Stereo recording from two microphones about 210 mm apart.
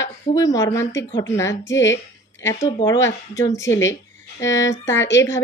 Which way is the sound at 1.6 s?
60° left (ahead or behind).